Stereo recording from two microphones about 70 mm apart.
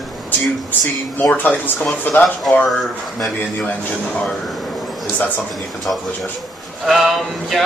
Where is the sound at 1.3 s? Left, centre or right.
Centre.